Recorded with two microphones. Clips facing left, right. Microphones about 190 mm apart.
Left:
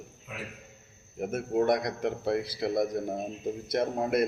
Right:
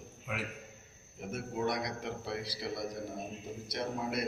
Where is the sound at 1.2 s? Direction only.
50° left (ahead or behind).